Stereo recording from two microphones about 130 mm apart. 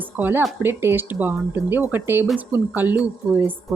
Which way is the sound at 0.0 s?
15° right (ahead or behind).